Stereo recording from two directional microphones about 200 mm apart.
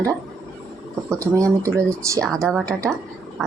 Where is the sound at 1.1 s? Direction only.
15° right (ahead or behind).